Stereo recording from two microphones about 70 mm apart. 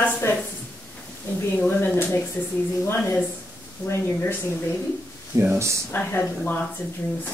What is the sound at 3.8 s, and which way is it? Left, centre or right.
Speech, left.